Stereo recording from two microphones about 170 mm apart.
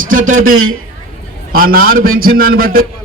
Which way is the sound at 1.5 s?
60° right (ahead or behind).